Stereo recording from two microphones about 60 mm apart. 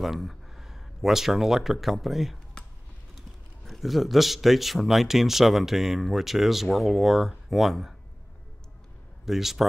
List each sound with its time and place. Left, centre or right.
0.0 s speech: centre
9.2 s speech: centre